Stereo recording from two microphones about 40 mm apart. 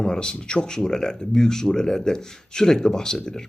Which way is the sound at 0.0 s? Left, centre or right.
Centre.